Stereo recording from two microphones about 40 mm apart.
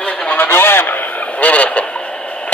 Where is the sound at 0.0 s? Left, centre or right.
Left.